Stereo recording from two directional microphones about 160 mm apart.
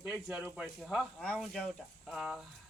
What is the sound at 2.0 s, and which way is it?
Speech, centre (ahead or behind).